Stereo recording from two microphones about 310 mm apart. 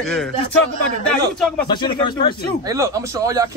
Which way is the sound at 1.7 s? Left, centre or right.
Centre.